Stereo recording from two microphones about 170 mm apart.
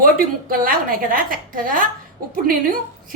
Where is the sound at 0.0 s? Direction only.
60° right (ahead or behind).